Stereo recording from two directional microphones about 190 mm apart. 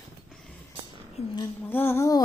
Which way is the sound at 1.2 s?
35° left (ahead or behind).